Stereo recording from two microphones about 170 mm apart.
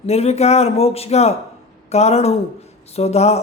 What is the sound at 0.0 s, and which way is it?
A man's voice, 40° left (ahead or behind).